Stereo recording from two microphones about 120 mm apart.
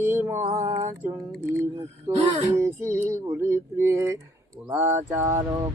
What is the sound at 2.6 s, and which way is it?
Mantra, 25° right (ahead or behind).